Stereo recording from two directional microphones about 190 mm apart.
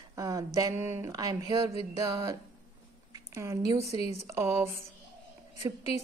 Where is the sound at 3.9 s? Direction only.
35° left (ahead or behind).